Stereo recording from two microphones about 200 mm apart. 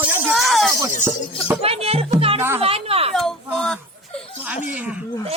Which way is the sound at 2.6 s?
30° right (ahead or behind).